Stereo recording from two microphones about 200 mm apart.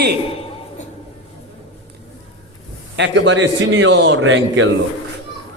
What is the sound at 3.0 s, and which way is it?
A man's voice, 65° right (ahead or behind).